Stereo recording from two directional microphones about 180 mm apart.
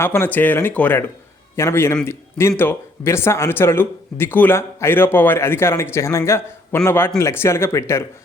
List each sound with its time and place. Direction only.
0.0 s speech: 15° left (ahead or behind)